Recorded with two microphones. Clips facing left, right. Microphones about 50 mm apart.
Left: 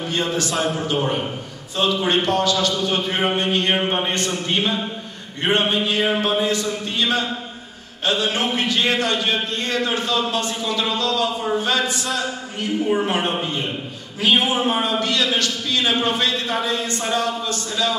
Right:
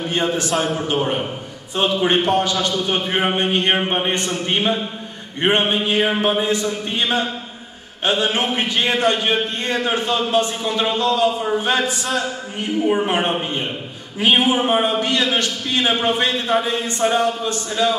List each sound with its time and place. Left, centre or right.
0.1 s a man's voice: right
0.5 s a man's voice: centre
1.8 s a man's voice: right
11.9 s a man's voice: centre
12.2 s a man's voice: right